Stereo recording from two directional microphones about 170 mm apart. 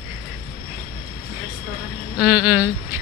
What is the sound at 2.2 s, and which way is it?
Speech, 5° right (ahead or behind).